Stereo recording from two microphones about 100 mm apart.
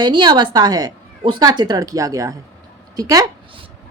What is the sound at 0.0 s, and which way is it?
A woman's voice, 45° right (ahead or behind).